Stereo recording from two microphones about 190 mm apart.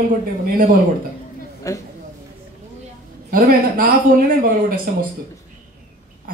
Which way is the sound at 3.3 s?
50° right (ahead or behind).